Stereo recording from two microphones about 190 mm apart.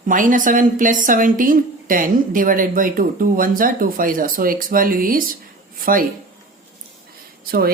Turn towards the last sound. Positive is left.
turn(degrees=-50)  # may be behind; listen again after turning